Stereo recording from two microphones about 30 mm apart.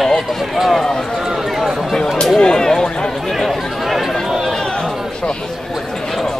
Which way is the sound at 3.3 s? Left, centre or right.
Centre.